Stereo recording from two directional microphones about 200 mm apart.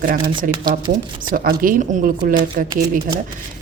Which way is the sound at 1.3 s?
45° right (ahead or behind).